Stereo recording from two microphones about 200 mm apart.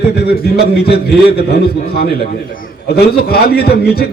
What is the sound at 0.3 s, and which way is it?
Speech, 50° left (ahead or behind).